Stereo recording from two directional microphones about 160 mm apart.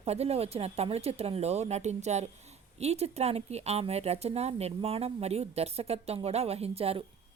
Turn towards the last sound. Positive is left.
turn(degrees=-40)  # may be behind; listen again after turning